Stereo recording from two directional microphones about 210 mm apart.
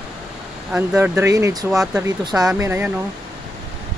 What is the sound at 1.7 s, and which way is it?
Speech, centre (ahead or behind).